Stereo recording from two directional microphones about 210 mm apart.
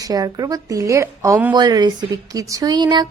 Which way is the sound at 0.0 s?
20° right (ahead or behind).